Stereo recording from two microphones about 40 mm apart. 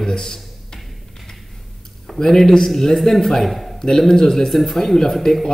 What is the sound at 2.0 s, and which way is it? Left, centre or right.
A man's voice, centre.